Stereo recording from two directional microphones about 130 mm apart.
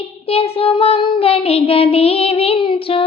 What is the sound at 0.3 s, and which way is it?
Child singing, 50° left (ahead or behind).